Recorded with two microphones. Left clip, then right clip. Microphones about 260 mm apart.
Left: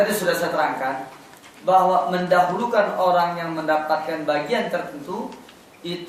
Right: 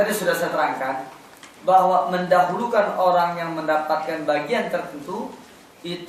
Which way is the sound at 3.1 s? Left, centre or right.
Centre.